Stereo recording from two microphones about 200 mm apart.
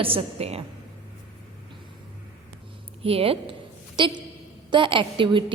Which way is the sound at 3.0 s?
30° right (ahead or behind).